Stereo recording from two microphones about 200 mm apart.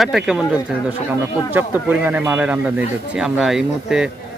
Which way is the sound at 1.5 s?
10° right (ahead or behind).